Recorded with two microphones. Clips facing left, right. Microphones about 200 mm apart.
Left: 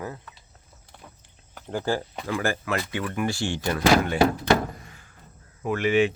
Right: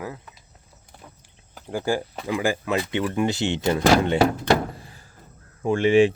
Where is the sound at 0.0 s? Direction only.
10° right (ahead or behind).